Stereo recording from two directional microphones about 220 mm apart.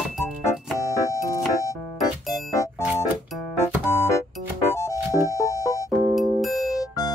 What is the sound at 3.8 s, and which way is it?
Music, 10° left (ahead or behind).